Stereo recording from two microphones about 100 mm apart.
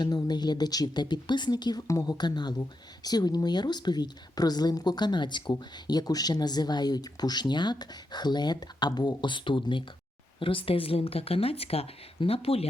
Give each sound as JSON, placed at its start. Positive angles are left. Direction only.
{"t": 0.0, "sound": "speech", "side_deg": 40}